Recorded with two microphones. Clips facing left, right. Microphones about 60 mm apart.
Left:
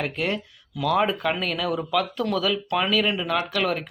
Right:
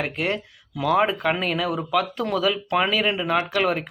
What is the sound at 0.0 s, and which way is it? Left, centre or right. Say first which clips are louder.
Speech: right 1 dB; centre.